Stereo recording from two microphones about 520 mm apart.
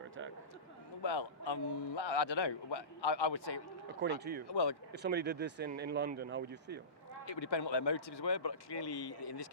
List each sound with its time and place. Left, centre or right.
1.0 s a man's voice: left
4.2 s speech: centre
4.4 s a man's voice: left
4.9 s speech: centre
7.5 s a man's voice: left